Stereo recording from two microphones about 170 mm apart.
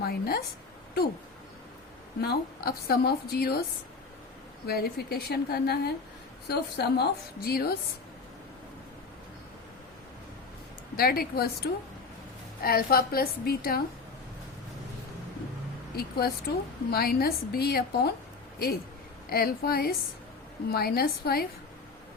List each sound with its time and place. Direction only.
0.0 s a woman's voice: 65° left (ahead or behind)
2.2 s a woman's voice: 65° left (ahead or behind)
4.6 s a woman's voice: 65° left (ahead or behind)
10.9 s a woman's voice: 65° left (ahead or behind)
16.0 s a woman's voice: 65° left (ahead or behind)
19.3 s a woman's voice: 65° left (ahead or behind)